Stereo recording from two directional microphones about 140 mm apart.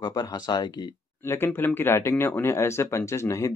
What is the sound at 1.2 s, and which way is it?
Speech, 15° left (ahead or behind).